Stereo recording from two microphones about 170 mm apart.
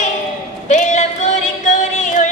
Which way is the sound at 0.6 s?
45° left (ahead or behind).